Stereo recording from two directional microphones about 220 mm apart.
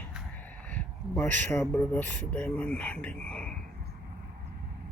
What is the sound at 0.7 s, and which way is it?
Speech, 10° left (ahead or behind).